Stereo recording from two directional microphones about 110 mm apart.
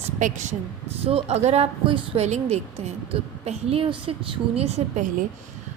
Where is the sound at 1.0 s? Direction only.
70° right (ahead or behind).